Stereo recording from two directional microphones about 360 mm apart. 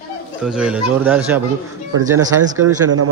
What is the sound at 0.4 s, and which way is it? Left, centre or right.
A man's voice, centre.